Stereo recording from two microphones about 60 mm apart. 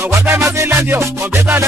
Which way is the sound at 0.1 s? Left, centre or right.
Right.